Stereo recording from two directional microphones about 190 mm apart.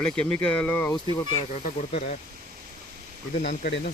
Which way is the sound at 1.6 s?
45° left (ahead or behind).